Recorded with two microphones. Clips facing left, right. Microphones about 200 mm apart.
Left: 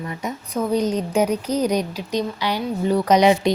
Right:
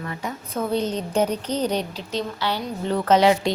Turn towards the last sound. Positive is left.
turn(degrees=20)  # may be behind; listen again after turning